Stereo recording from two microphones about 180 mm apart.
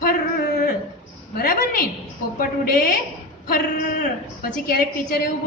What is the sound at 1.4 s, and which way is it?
A woman's voice, 55° left (ahead or behind).